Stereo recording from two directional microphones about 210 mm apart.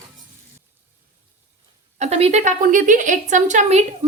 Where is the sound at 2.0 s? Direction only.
30° right (ahead or behind).